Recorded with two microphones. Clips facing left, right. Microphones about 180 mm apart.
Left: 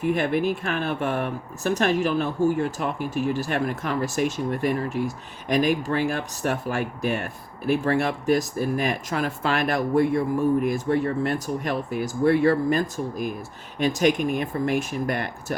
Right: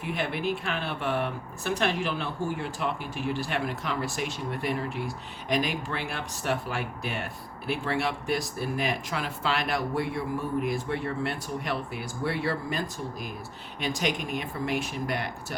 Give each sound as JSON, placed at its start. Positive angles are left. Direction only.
{"t": 0.0, "sound": "speech", "side_deg": 45}